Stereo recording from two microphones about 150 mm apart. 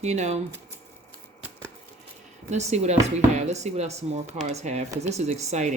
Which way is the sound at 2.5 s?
50° right (ahead or behind).